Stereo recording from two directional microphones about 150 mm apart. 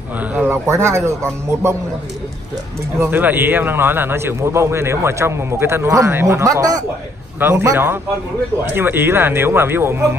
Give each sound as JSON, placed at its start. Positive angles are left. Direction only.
{"t": 0.2, "sound": "a man's voice", "side_deg": -10}
{"t": 3.0, "sound": "a man's voice", "side_deg": -15}